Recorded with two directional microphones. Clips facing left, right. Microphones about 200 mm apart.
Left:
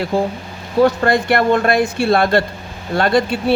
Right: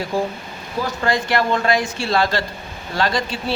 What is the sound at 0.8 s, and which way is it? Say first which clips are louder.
Speech: left 8 dB; 60° left (ahead or behind).